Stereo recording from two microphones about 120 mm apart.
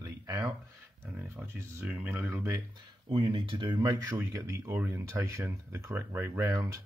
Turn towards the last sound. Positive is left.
turn(degrees=-25)  # may be behind; listen again after turning